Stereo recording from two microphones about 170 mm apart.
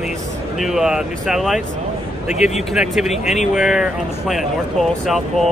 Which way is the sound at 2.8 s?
5° right (ahead or behind).